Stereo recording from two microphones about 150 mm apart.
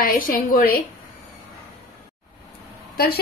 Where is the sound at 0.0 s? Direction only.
70° left (ahead or behind).